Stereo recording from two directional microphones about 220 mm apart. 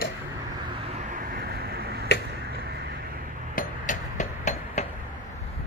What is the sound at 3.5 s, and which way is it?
Hammer, 35° left (ahead or behind).